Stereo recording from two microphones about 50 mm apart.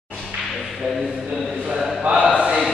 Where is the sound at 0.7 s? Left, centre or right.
Centre.